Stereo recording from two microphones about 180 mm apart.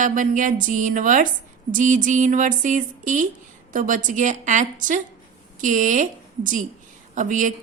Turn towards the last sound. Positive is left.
turn(degrees=-45)  # may be behind; listen again after turning